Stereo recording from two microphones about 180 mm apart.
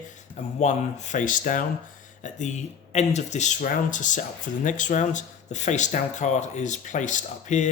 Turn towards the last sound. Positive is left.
turn(degrees=40)  # may be behind; listen again after turning